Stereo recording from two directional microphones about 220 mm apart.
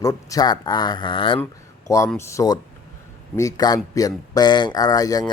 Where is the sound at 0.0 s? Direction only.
15° left (ahead or behind).